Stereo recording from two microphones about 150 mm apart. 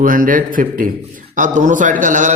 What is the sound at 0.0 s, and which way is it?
Speech, 65° right (ahead or behind).